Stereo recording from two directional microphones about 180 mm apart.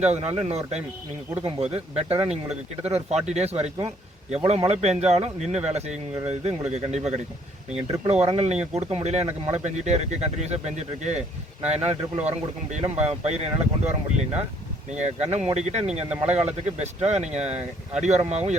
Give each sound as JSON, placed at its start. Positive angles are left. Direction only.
{"t": 0.0, "sound": "speech", "side_deg": -35}